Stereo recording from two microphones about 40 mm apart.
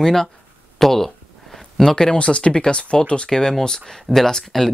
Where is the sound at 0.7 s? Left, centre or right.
Centre.